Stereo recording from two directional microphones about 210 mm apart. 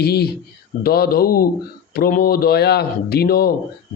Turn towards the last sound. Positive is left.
turn(degrees=45)  # may be behind; listen again after turning